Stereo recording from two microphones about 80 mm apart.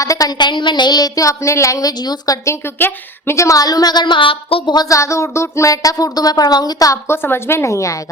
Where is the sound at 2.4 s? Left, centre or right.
Left.